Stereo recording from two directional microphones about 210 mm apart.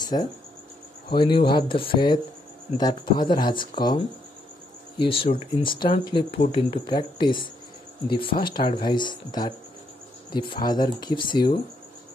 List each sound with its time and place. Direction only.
0.0 s speech: 20° left (ahead or behind)